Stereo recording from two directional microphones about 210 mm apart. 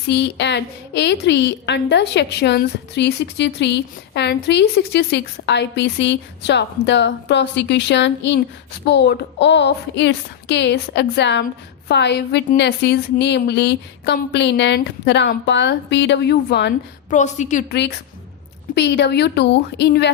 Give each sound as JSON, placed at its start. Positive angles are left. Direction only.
{"t": 0.1, "sound": "a woman's voice", "side_deg": 55}
{"t": 17.1, "sound": "a woman's voice", "side_deg": 35}
{"t": 17.7, "sound": "a woman's voice", "side_deg": 55}